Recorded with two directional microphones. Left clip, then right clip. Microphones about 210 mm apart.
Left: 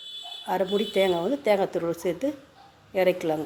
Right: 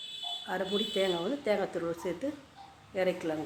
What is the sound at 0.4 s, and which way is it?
Speech, 30° left (ahead or behind).